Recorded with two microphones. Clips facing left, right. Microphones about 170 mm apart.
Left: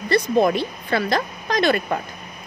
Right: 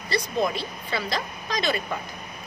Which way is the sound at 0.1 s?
60° left (ahead or behind).